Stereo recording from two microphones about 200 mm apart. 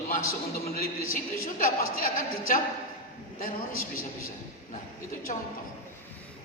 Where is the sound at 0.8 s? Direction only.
45° left (ahead or behind).